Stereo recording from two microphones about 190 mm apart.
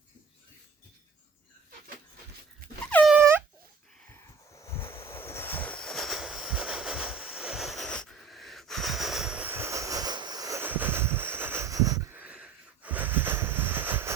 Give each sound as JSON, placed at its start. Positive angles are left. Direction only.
{"t": 2.6, "sound": "air horn", "side_deg": -50}
{"t": 3.1, "sound": "a sound", "side_deg": -10}
{"t": 4.1, "sound": "train", "side_deg": 15}